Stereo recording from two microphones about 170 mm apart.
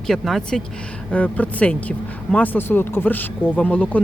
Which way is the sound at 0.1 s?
Centre (ahead or behind).